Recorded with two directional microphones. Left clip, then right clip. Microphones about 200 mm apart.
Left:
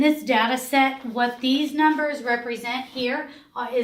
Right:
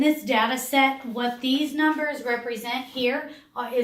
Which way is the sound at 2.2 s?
45° left (ahead or behind).